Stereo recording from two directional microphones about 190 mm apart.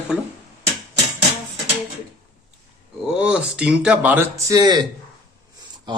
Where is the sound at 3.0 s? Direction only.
5° right (ahead or behind).